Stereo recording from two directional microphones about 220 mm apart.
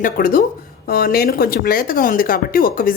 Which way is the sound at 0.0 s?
40° left (ahead or behind).